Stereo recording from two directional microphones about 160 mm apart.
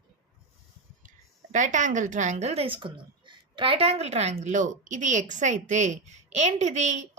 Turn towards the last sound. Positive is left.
turn(degrees=-50)  # may be behind; listen again after turning